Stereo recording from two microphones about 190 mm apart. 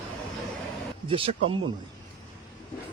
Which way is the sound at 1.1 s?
30° right (ahead or behind).